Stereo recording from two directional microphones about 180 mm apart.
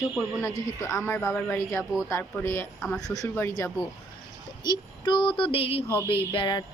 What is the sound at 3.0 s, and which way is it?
Speech, 20° left (ahead or behind).